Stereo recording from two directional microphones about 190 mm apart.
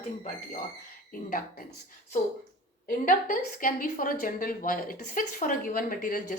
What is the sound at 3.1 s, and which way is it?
A woman's voice, 45° left (ahead or behind).